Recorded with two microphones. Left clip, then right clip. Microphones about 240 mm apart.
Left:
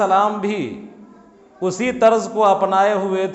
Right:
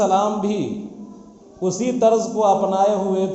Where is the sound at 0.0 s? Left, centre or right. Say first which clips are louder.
Left 2 dB; left.